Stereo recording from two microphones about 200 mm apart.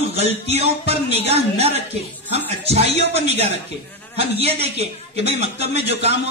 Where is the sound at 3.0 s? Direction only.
30° right (ahead or behind).